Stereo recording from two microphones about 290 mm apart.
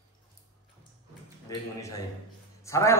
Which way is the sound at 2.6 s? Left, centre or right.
Centre.